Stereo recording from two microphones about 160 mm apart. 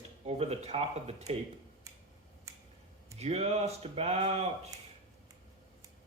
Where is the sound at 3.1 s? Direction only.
40° right (ahead or behind).